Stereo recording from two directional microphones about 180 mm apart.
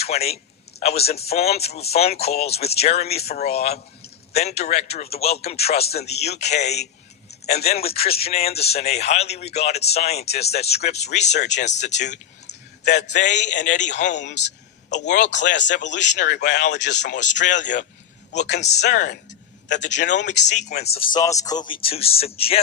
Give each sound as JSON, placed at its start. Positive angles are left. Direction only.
{"t": 0.0, "sound": "a man's voice", "side_deg": 35}
{"t": 12.5, "sound": "clicking", "side_deg": 65}
{"t": 13.1, "sound": "speech", "side_deg": 40}
{"t": 18.9, "sound": "speech", "side_deg": 45}
{"t": 20.8, "sound": "speech", "side_deg": 60}
{"t": 21.1, "sound": "speech", "side_deg": 20}